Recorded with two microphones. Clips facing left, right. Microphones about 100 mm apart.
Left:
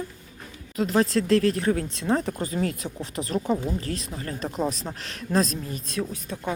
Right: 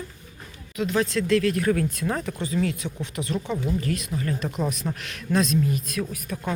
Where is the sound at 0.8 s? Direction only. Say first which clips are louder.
Left 2 dB; 40° left (ahead or behind).